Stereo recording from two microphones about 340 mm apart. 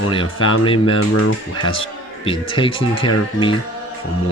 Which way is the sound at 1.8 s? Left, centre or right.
Centre.